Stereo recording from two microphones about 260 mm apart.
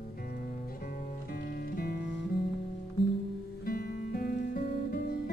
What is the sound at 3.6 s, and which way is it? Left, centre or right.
Music, left.